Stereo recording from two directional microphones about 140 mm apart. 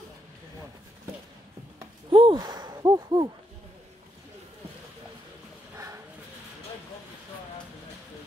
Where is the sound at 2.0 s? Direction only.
40° right (ahead or behind).